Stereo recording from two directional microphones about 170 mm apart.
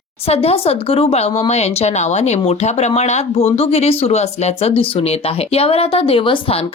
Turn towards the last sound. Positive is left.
turn(degrees=35)  # may be behind; listen again after turning